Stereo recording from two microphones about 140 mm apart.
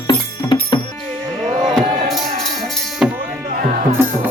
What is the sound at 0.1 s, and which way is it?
Music, 35° left (ahead or behind).